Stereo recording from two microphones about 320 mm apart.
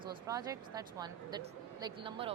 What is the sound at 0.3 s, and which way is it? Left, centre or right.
A woman's voice, centre.